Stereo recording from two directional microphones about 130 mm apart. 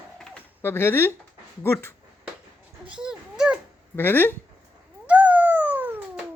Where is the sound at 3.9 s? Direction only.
15° left (ahead or behind).